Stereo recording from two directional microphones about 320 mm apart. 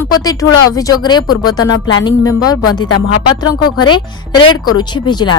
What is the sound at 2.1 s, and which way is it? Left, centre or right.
Speech, centre.